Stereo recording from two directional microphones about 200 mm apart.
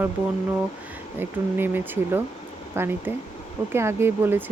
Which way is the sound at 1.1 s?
10° right (ahead or behind).